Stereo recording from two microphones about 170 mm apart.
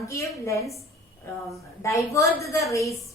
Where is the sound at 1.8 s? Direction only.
20° left (ahead or behind).